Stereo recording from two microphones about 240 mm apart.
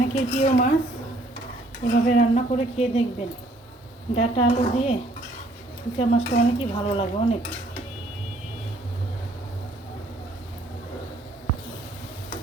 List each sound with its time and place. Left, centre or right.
0.1 s speech: left
1.8 s speech: left
4.1 s speech: left
6.0 s speech: left